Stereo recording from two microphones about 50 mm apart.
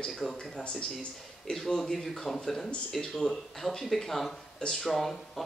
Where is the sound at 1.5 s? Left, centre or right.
Centre.